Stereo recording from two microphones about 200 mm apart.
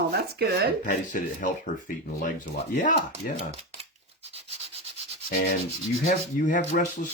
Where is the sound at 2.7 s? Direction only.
40° left (ahead or behind).